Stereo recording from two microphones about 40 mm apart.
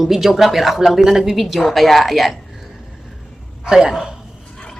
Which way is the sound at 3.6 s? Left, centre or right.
Centre.